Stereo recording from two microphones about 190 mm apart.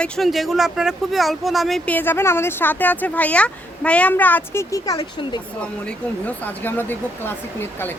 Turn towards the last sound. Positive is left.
turn(degrees=10)  # may be behind; listen again after turning